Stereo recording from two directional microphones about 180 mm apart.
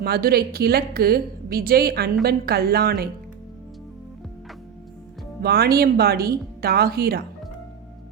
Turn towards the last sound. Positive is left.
turn(degrees=-60)  # may be behind; listen again after turning